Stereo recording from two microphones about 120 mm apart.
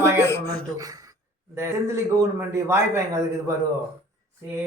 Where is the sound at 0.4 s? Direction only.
30° right (ahead or behind).